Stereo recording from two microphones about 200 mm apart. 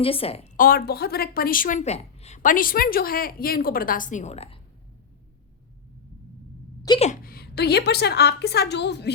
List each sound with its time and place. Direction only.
0.0 s a woman's voice: 30° left (ahead or behind)
6.9 s speech: 20° left (ahead or behind)
7.3 s a woman's voice: 50° left (ahead or behind)